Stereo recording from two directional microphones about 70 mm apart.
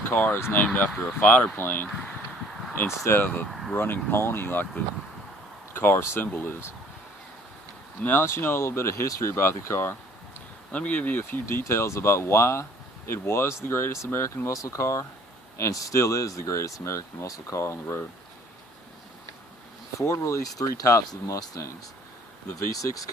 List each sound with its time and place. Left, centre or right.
0.0 s speech: left
2.7 s speech: left
3.2 s speech: left
5.7 s speech: left
8.0 s speech: left
10.7 s speech: left
20.0 s speech: left